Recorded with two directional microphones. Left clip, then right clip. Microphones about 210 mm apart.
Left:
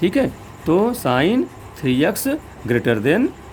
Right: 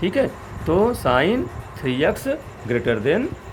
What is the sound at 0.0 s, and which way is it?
Speech, 35° left (ahead or behind).